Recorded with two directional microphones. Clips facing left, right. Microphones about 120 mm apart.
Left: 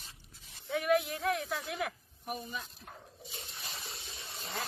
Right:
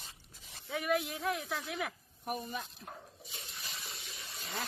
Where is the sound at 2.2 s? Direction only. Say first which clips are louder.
Right 2 dB; 50° right (ahead or behind).